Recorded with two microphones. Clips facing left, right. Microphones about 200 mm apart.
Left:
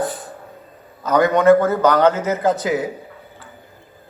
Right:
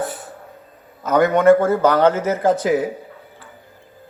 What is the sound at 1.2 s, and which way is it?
Speech, 10° right (ahead or behind).